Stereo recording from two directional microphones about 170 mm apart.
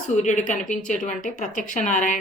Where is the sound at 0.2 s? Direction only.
45° left (ahead or behind).